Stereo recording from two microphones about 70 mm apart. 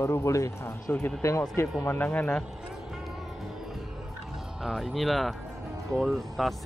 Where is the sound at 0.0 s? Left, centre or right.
Left.